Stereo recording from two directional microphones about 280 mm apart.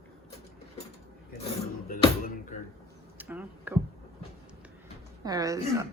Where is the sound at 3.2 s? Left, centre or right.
Centre.